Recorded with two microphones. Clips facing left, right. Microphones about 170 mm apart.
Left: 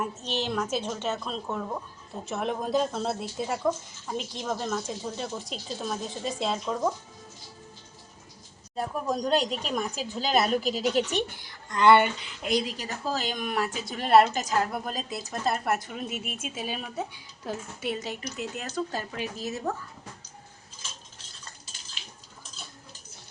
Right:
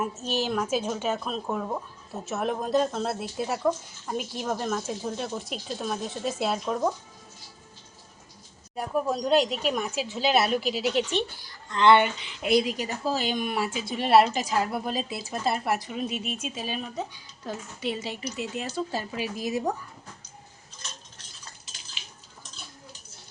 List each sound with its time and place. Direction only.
0.2 s a woman's voice: 10° right (ahead or behind)
8.7 s a woman's voice: 10° right (ahead or behind)
11.0 s a woman's voice: 15° left (ahead or behind); by 19.7 s 15° right (ahead or behind)
20.7 s cutlery: 5° left (ahead or behind)